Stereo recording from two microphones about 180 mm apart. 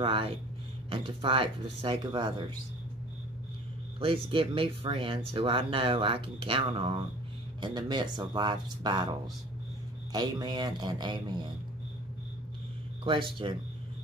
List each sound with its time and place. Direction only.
0.0 s speech: 30° right (ahead or behind)
4.0 s speech: 30° right (ahead or behind)
10.1 s speech: 25° right (ahead or behind)
13.0 s speech: 30° right (ahead or behind)